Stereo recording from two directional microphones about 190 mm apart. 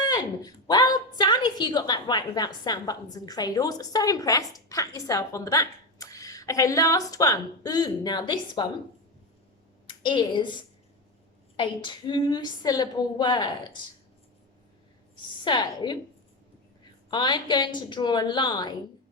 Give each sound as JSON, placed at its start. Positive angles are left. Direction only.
{"t": 0.0, "sound": "a woman's voice", "side_deg": 20}
{"t": 9.8, "sound": "a woman's voice", "side_deg": 25}
{"t": 15.4, "sound": "a woman's voice", "side_deg": 25}
{"t": 17.1, "sound": "a woman's voice", "side_deg": 25}